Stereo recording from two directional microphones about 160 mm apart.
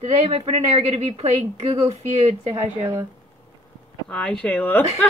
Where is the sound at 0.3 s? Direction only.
40° right (ahead or behind).